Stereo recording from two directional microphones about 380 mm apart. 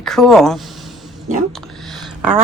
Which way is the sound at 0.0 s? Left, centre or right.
Centre.